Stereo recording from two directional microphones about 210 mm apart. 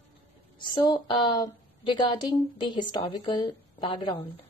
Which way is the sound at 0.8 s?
20° left (ahead or behind).